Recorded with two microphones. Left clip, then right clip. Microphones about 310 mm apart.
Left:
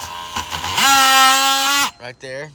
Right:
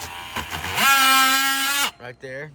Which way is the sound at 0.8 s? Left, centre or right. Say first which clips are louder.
Left 4 dB; centre.